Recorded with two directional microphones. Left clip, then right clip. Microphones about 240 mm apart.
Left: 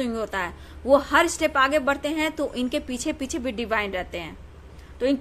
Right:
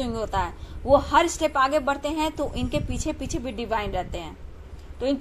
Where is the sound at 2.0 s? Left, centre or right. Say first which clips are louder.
Left 1 dB; left.